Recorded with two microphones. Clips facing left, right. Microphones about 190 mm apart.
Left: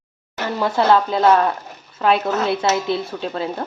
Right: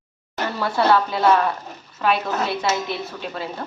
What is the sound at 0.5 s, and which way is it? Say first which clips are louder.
Speech: left 6 dB; 20° left (ahead or behind).